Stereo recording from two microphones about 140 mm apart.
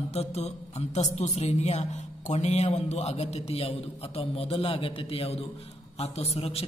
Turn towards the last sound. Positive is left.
turn(degrees=45)  # may be behind; listen again after turning